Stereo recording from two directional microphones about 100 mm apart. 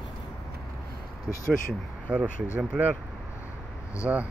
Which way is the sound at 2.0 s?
15° right (ahead or behind).